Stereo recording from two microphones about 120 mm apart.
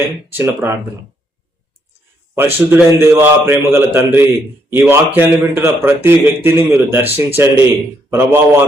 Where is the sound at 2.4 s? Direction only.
20° right (ahead or behind).